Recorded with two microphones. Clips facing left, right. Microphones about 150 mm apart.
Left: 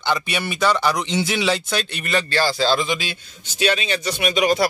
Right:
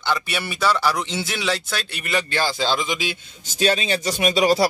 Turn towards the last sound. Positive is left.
turn(degrees=-35)  # may be behind; listen again after turning